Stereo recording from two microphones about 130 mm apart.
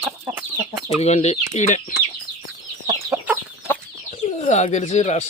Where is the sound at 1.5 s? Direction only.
75° left (ahead or behind).